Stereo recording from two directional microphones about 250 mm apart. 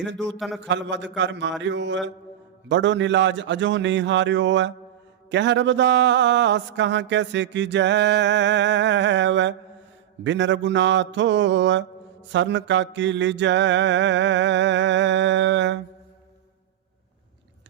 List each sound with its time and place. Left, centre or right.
0.2 s a man's voice: centre
0.7 s speech: right